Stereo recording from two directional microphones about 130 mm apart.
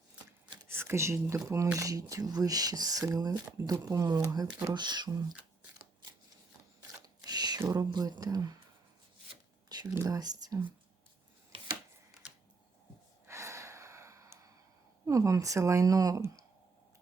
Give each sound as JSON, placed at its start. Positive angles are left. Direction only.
{"t": 0.7, "sound": "speech", "side_deg": -20}
{"t": 7.3, "sound": "a sound", "side_deg": -30}
{"t": 7.7, "sound": "speech", "side_deg": -30}
{"t": 9.6, "sound": "a sound", "side_deg": -30}
{"t": 9.9, "sound": "speech", "side_deg": -25}
{"t": 13.2, "sound": "gasp", "side_deg": -20}
{"t": 15.0, "sound": "speech", "side_deg": -25}